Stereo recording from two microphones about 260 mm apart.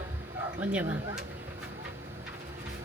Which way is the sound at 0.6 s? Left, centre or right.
Centre.